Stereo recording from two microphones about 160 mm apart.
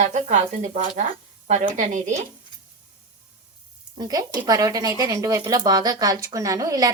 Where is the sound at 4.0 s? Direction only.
25° right (ahead or behind).